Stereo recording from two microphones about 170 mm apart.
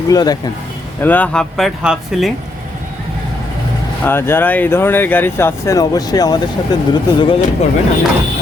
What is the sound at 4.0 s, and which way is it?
Speech, 15° left (ahead or behind).